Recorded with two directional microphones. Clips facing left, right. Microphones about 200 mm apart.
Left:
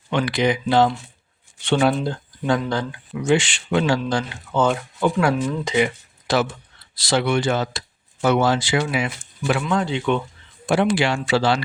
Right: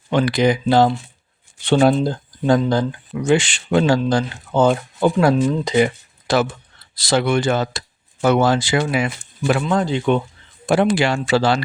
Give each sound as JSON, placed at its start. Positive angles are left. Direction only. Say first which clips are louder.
{"t": 0.1, "sound": "speech", "louder": "right 4 dB", "side_deg": -40}